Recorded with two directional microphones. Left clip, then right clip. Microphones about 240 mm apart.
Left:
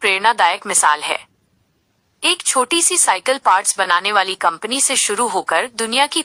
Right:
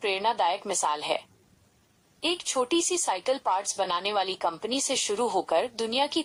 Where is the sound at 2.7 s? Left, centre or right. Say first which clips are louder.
Left 10 dB; left.